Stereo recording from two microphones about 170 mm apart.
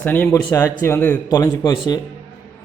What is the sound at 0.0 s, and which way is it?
A man's voice, 10° left (ahead or behind).